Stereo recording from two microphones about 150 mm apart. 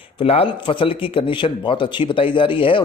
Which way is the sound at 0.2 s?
40° left (ahead or behind).